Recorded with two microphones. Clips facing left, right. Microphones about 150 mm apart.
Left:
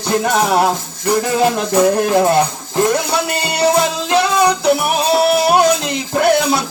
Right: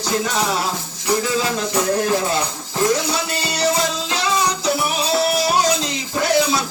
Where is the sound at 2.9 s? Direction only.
55° left (ahead or behind).